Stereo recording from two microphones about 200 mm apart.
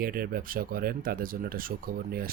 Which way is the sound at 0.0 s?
45° right (ahead or behind).